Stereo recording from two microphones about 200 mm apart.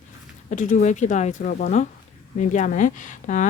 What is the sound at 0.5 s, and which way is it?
Speech, 40° left (ahead or behind).